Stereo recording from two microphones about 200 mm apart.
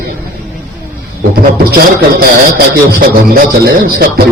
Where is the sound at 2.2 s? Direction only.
50° right (ahead or behind).